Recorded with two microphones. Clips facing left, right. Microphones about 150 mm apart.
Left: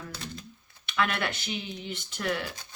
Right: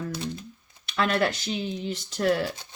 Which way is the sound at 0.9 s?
35° right (ahead or behind).